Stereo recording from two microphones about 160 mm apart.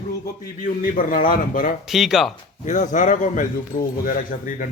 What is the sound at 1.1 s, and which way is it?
Speech, 60° left (ahead or behind).